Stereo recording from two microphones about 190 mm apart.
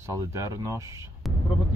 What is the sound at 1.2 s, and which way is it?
Speech, centre (ahead or behind).